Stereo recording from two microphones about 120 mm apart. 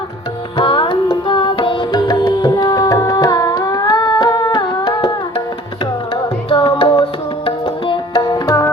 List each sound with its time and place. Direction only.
0.5 s music: 45° left (ahead or behind)
6.5 s music: 45° left (ahead or behind)
7.4 s tabla: 45° left (ahead or behind); by 8.7 s 30° left (ahead or behind)